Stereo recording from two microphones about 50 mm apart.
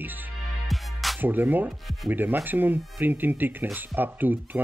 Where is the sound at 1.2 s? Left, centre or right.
Right.